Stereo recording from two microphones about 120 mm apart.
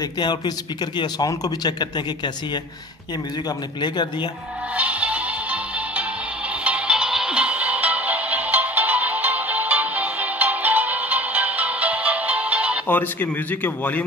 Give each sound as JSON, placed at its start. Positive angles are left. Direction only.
{"t": 0.9, "sound": "speech", "side_deg": 35}
{"t": 4.7, "sound": "music", "side_deg": -10}
{"t": 12.8, "sound": "a man's voice", "side_deg": 15}